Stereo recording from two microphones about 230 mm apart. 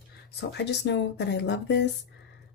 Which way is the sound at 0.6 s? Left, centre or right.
Left.